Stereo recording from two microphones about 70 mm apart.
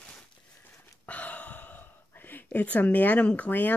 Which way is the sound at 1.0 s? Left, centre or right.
Left.